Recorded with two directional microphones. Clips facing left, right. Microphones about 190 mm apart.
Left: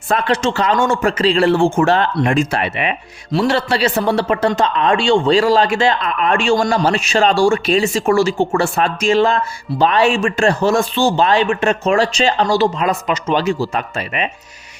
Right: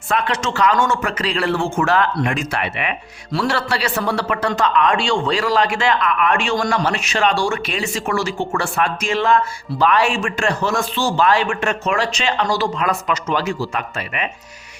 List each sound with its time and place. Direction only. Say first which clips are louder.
0.1 s speech: left 4 dB; 30° left (ahead or behind)